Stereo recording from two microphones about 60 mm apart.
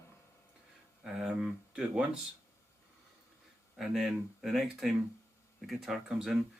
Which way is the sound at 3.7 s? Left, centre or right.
Centre.